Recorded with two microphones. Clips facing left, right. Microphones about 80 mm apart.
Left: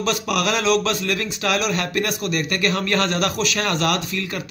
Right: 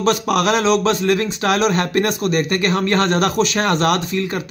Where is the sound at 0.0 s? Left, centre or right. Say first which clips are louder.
Right 5 dB; right.